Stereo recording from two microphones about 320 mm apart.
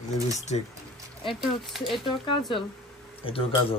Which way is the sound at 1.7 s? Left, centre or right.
Centre.